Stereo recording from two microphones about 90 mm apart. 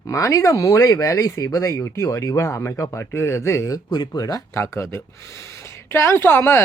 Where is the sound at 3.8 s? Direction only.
55° left (ahead or behind); by 6.6 s 25° left (ahead or behind).